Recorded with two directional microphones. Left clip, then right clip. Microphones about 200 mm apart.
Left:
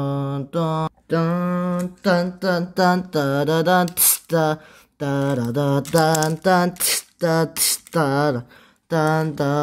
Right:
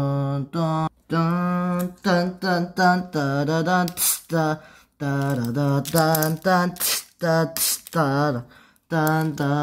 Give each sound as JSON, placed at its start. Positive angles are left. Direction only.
{"t": 0.0, "sound": "mantra", "side_deg": 20}